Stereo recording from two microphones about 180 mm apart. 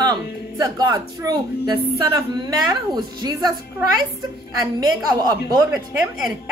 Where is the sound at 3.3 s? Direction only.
20° right (ahead or behind).